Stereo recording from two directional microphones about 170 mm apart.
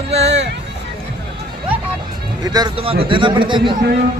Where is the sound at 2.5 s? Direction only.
30° right (ahead or behind).